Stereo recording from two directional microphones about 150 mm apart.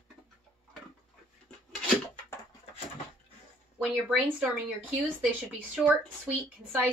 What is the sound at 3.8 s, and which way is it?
Speech, 5° right (ahead or behind).